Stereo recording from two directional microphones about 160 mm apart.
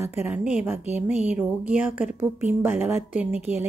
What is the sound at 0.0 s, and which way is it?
Speech, 15° right (ahead or behind).